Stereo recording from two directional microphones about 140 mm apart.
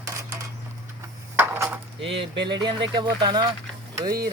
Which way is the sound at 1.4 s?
15° right (ahead or behind).